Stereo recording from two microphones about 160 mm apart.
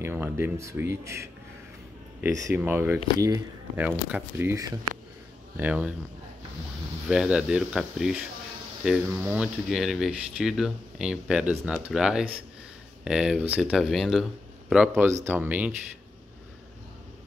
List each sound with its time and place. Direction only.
0.0 s speech: 15° right (ahead or behind)
2.5 s speech: 10° right (ahead or behind)
3.7 s speech: 10° right (ahead or behind)
7.1 s speech: 5° right (ahead or behind)